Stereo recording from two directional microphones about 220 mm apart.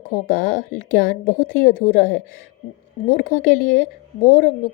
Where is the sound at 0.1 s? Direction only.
35° left (ahead or behind).